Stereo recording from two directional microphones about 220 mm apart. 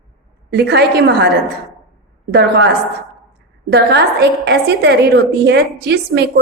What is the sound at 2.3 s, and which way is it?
Speech, 50° right (ahead or behind).